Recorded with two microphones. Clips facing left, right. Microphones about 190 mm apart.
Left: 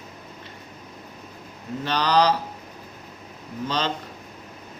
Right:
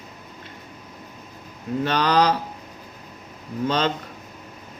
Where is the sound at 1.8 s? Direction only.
55° right (ahead or behind).